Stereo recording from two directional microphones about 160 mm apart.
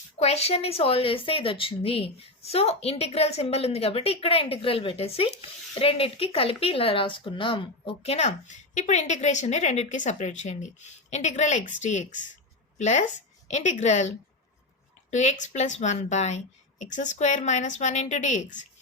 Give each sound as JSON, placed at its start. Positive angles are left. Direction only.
{"t": 0.2, "sound": "speech", "side_deg": 40}
{"t": 15.1, "sound": "speech", "side_deg": 45}